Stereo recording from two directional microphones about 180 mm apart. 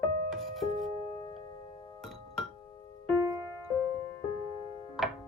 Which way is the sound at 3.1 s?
20° right (ahead or behind).